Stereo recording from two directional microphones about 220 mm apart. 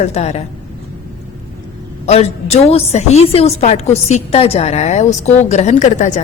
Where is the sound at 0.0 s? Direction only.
30° left (ahead or behind).